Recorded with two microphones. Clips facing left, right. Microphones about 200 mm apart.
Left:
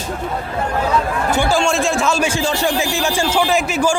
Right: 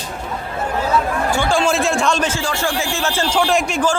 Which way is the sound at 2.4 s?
20° left (ahead or behind).